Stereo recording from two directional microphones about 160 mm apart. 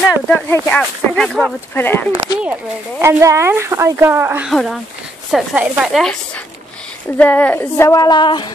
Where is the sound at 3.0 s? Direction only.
15° right (ahead or behind).